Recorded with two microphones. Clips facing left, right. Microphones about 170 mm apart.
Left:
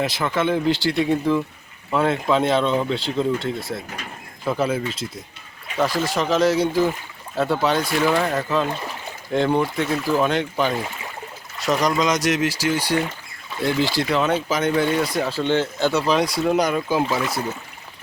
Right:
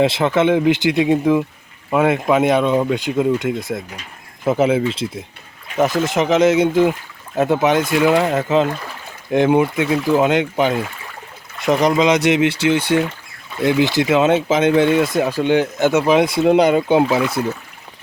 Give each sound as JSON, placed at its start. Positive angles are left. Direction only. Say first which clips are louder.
{"t": 0.0, "sound": "speech", "louder": "right 7 dB", "side_deg": -25}
{"t": 13.7, "sound": "speech", "louder": "right 6 dB", "side_deg": -20}